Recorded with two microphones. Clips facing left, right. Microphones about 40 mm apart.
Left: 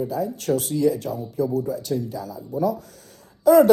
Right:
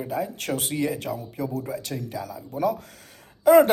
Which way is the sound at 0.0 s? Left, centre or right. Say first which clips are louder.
Left 3 dB; right.